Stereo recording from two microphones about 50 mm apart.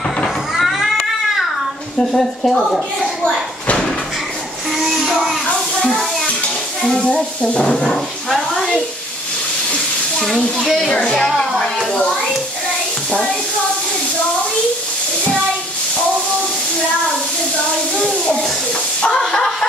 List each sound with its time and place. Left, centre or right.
0.6 s cat: centre
2.0 s speech: centre
4.7 s child singing: centre
5.8 s music: centre
6.8 s speech: centre
7.4 s speech: left
7.7 s speech: centre
10.6 s speech: centre
10.9 s speech: centre
11.1 s speech: centre
17.9 s a sound: centre